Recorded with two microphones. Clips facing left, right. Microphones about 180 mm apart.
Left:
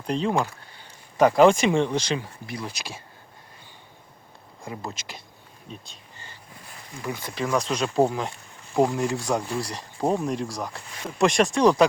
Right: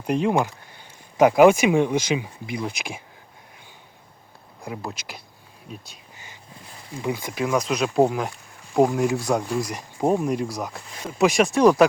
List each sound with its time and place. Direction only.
0.0 s speech: 10° right (ahead or behind)
4.6 s speech: centre (ahead or behind)
7.0 s speech: 15° right (ahead or behind)